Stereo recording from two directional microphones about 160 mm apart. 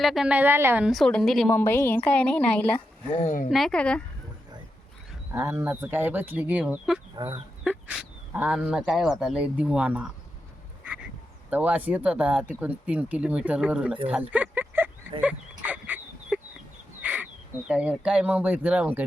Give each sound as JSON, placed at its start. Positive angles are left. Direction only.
{"t": 0.0, "sound": "speech", "side_deg": 0}
{"t": 0.9, "sound": "a woman's voice", "side_deg": 0}
{"t": 1.5, "sound": "a woman's voice", "side_deg": 15}
{"t": 3.1, "sound": "speech", "side_deg": 50}
{"t": 3.5, "sound": "a woman's voice", "side_deg": 5}
{"t": 5.3, "sound": "speech", "side_deg": -15}
{"t": 11.5, "sound": "speech", "side_deg": -10}
{"t": 14.1, "sound": "a sound", "side_deg": -10}
{"t": 15.2, "sound": "dog", "side_deg": -10}
{"t": 17.0, "sound": "crow", "side_deg": -10}
{"t": 17.7, "sound": "speech", "side_deg": -5}